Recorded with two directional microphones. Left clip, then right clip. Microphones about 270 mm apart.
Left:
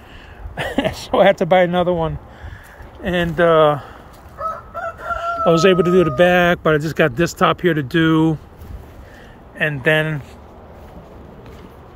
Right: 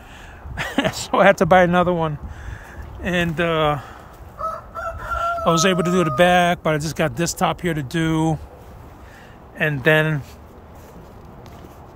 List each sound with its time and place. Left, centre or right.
0.6 s speech: centre
5.2 s speech: centre
9.6 s speech: right